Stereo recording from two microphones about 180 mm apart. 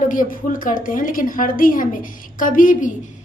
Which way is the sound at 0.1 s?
50° left (ahead or behind).